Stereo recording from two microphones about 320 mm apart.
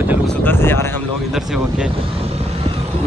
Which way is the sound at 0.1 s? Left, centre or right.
Centre.